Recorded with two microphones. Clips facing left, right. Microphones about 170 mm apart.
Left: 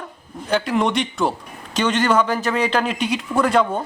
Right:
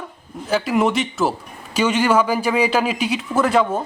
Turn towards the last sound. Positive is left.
turn(degrees=0)  # may be behind; listen again after turning